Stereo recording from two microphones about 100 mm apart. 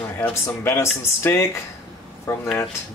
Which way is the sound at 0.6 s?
25° left (ahead or behind).